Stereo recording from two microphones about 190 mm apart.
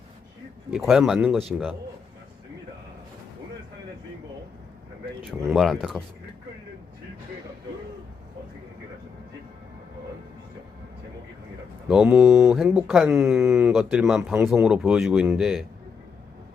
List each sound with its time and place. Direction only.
0.7 s speech: 5° right (ahead or behind)
5.5 s speech: centre (ahead or behind)
11.9 s speech: 5° right (ahead or behind)